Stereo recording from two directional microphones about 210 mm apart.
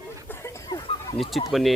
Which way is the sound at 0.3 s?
15° left (ahead or behind).